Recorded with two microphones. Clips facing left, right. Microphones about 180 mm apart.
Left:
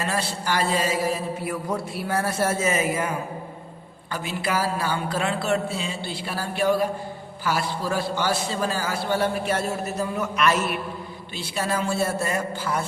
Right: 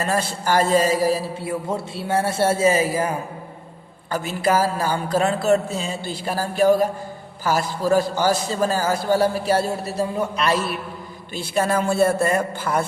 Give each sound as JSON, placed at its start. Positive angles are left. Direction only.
{"t": 0.0, "sound": "a man's voice", "side_deg": -45}
{"t": 11.3, "sound": "a man's voice", "side_deg": -50}